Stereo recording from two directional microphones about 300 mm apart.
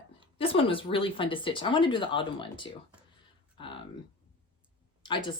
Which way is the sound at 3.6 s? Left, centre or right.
Centre.